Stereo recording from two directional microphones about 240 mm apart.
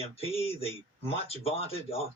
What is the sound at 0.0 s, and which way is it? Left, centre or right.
Speech, left.